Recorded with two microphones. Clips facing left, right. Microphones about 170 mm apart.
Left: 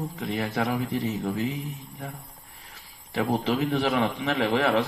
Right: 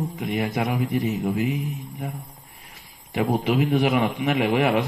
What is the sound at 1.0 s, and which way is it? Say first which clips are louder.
Speech: right 4 dB; 15° right (ahead or behind).